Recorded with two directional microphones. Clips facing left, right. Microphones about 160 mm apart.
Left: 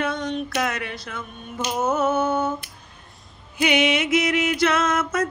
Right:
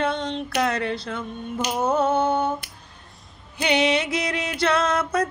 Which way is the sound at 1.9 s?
30° right (ahead or behind).